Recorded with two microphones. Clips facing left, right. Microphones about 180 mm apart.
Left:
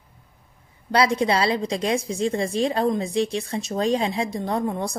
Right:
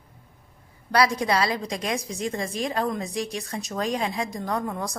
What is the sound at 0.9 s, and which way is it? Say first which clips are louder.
A woman's voice: left 2 dB; 25° left (ahead or behind).